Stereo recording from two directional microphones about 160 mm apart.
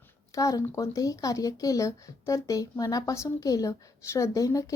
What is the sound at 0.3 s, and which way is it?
Speech, 20° left (ahead or behind).